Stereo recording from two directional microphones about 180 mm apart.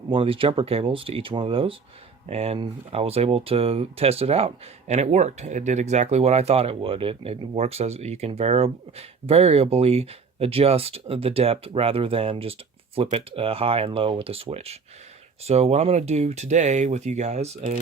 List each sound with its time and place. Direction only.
0.1 s speech: 30° right (ahead or behind)